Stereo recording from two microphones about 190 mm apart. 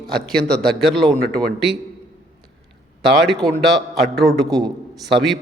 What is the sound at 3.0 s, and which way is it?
A man's voice, centre (ahead or behind).